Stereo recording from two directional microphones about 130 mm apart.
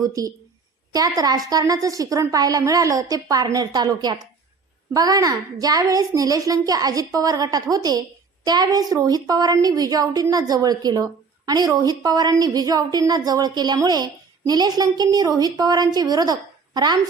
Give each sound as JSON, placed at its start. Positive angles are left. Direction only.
{"t": 0.0, "sound": "a woman's voice", "side_deg": -25}